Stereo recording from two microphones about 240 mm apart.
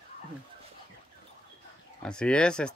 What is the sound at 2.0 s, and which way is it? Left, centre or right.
Speech, centre.